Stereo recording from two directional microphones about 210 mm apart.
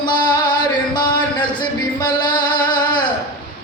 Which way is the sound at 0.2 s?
20° left (ahead or behind).